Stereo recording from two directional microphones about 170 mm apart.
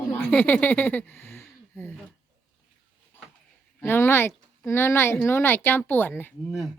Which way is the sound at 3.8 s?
15° left (ahead or behind).